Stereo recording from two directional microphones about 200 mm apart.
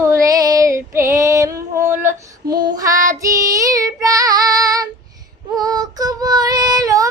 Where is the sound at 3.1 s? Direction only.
15° right (ahead or behind).